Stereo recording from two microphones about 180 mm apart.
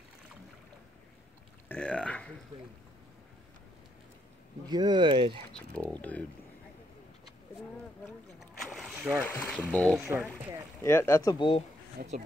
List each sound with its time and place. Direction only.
1.7 s burping: 5° left (ahead or behind)
4.6 s speech: 25° right (ahead or behind)
5.5 s speech: 5° left (ahead or behind)
8.5 s rowboat: centre (ahead or behind)
9.2 s speech: 10° left (ahead or behind)
9.9 s speech: 10° right (ahead or behind)
10.8 s speech: 15° left (ahead or behind)
12.0 s speech: 60° right (ahead or behind)